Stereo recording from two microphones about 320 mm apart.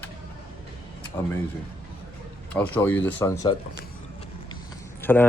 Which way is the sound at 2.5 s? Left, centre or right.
Centre.